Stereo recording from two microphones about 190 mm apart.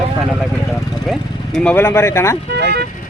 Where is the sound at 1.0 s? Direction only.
5° left (ahead or behind).